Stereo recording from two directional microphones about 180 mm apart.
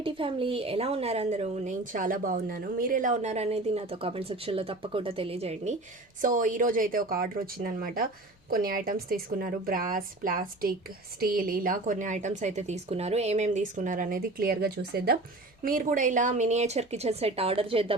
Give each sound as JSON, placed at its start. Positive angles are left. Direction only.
{"t": 0.0, "sound": "a woman's voice", "side_deg": -30}
{"t": 6.2, "sound": "a woman's voice", "side_deg": -45}